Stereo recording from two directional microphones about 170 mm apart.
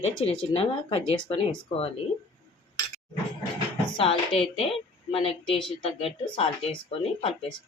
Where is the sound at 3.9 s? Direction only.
35° left (ahead or behind).